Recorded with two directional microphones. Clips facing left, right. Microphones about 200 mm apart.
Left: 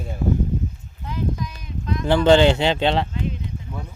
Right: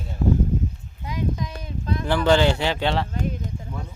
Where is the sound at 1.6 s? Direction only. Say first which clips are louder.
Left 1 dB; 30° right (ahead or behind).